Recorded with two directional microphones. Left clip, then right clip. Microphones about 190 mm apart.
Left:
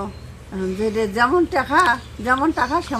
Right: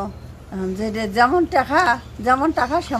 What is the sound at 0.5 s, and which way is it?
A woman's voice, 20° right (ahead or behind).